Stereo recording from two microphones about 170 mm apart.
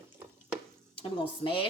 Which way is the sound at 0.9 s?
30° left (ahead or behind).